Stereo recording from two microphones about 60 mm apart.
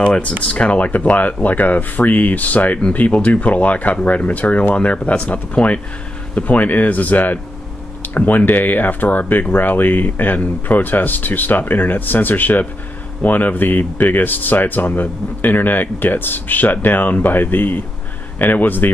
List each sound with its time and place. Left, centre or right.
0.0 s speech: centre